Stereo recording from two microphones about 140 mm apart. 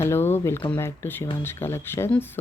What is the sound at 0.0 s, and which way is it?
Speech, 15° left (ahead or behind).